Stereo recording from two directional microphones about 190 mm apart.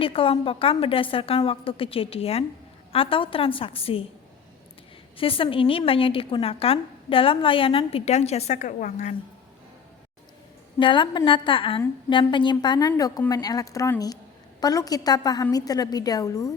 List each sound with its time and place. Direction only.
0.0 s a woman's voice: 30° left (ahead or behind)
5.1 s a woman's voice: 30° left (ahead or behind)
10.8 s a woman's voice: 25° left (ahead or behind)